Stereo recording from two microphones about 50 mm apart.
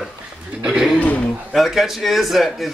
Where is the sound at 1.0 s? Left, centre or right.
Left.